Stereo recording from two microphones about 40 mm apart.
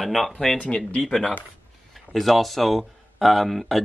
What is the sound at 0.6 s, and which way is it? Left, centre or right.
Speech, left.